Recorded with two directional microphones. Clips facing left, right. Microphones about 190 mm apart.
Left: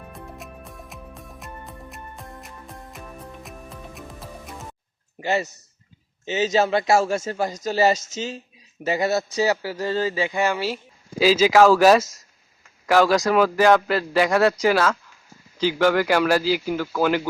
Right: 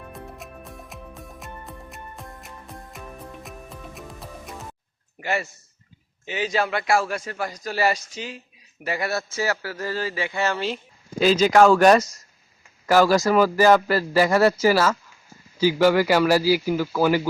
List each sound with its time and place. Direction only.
0.1 s music: centre (ahead or behind)
5.2 s a man's voice: 20° left (ahead or behind); by 17.2 s 10° right (ahead or behind)